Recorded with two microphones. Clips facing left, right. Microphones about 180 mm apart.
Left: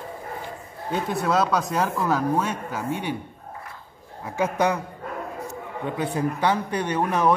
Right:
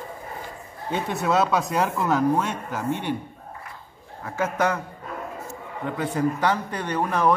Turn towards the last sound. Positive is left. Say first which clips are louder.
# left 1 dB
turn(degrees=10)  # may be behind; listen again after turning